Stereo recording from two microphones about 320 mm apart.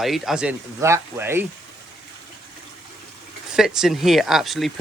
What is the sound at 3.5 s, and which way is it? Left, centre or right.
Speech, centre.